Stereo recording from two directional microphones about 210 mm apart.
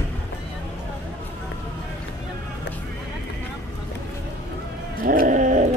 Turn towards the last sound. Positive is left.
turn(degrees=-35)  # may be behind; listen again after turning